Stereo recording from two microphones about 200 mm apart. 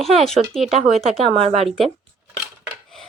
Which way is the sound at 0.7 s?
30° right (ahead or behind).